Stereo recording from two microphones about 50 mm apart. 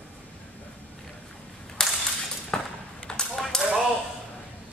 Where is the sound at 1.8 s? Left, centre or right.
Centre.